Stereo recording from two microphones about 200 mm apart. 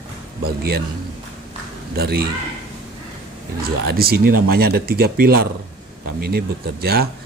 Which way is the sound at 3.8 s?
50° right (ahead or behind).